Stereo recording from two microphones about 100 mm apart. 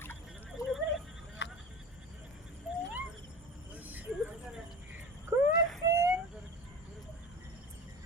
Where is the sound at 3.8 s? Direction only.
15° right (ahead or behind).